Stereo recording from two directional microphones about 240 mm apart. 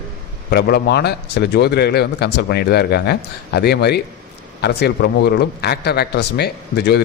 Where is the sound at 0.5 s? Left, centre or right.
Left.